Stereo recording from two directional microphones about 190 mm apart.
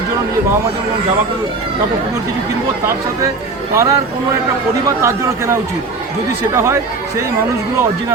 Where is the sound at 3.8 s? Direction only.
15° right (ahead or behind).